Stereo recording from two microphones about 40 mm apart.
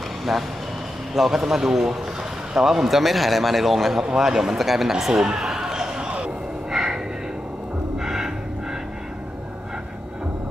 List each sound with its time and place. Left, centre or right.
0.2 s speech: centre
5.4 s a sound: centre
8.0 s music: centre